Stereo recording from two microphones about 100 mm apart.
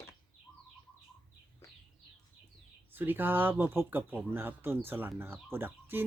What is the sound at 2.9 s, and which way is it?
Speech, 20° right (ahead or behind).